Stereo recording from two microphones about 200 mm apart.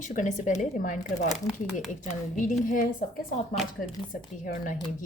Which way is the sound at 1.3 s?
Centre (ahead or behind).